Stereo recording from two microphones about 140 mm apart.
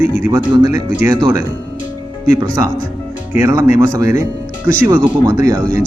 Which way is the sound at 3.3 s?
20° right (ahead or behind).